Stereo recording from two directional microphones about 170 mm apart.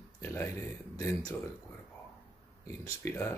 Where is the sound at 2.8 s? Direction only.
15° left (ahead or behind).